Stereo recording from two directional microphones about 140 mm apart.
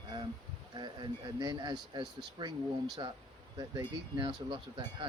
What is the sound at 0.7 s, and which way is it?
Speech, 30° right (ahead or behind).